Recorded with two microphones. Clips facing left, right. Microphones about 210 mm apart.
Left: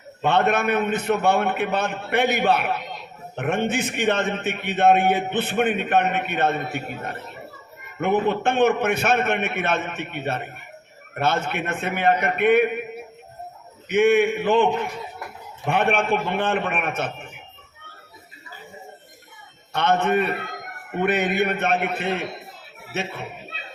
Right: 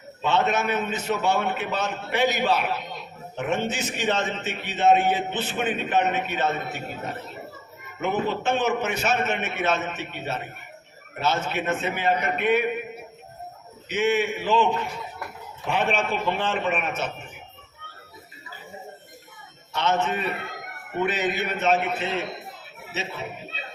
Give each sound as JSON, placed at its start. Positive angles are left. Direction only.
{"t": 0.2, "sound": "a man's voice", "side_deg": 55}
{"t": 13.8, "sound": "a man's voice", "side_deg": 60}
{"t": 19.7, "sound": "a man's voice", "side_deg": 55}